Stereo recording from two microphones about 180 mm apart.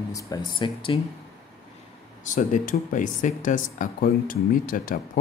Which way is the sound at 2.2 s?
45° left (ahead or behind).